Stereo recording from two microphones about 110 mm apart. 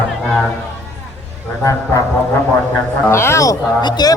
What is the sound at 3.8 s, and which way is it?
Speech, 40° left (ahead or behind).